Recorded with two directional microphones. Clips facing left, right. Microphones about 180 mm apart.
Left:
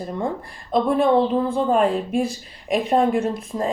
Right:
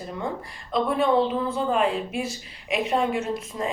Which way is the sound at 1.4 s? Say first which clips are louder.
Left 5 dB; 30° left (ahead or behind).